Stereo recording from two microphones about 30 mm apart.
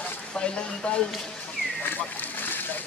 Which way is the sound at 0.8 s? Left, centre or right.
Left.